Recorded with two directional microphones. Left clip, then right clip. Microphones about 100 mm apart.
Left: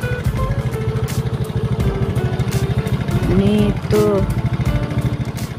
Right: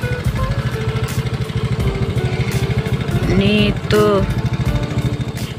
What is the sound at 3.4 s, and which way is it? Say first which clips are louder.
Music: right 3 dB; 25° left (ahead or behind).